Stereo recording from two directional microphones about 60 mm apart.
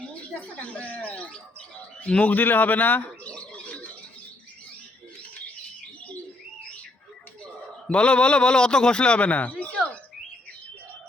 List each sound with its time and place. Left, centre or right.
0.3 s a man's voice: left
3.2 s bird: left
7.9 s a man's voice: centre